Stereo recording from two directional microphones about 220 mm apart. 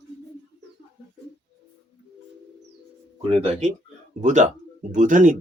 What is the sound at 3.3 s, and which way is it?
Speech, 30° right (ahead or behind).